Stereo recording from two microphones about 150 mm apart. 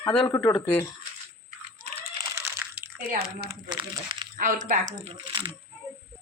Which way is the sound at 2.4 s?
15° right (ahead or behind).